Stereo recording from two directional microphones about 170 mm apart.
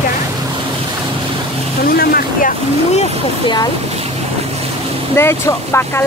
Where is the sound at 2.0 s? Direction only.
60° left (ahead or behind).